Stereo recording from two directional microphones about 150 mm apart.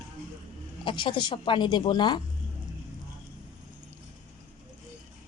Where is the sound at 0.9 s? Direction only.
30° left (ahead or behind).